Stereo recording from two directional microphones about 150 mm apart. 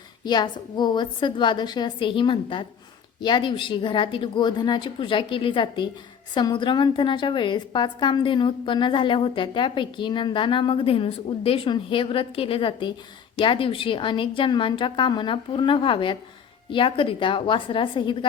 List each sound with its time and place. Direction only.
0.3 s a woman's voice: 30° left (ahead or behind)